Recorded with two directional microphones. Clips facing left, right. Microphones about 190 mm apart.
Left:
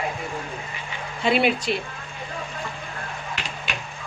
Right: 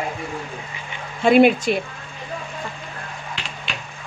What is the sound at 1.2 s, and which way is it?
Speech, 50° right (ahead or behind).